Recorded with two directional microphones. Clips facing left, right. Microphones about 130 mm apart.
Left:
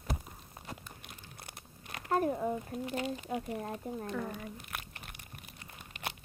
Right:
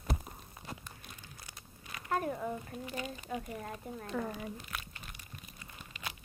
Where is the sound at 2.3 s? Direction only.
20° left (ahead or behind).